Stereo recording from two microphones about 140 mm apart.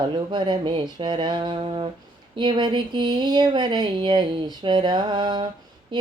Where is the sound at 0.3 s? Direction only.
35° right (ahead or behind).